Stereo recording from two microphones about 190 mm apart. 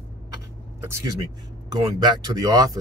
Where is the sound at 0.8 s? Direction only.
15° right (ahead or behind).